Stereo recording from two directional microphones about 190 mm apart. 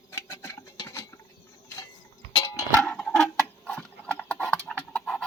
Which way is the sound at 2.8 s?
5° left (ahead or behind).